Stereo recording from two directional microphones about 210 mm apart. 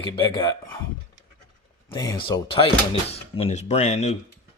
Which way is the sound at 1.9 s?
20° left (ahead or behind).